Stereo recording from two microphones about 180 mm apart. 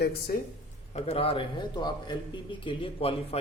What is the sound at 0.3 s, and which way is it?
Speech, 55° left (ahead or behind).